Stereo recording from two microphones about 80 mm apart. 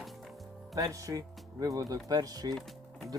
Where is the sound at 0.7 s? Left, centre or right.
Right.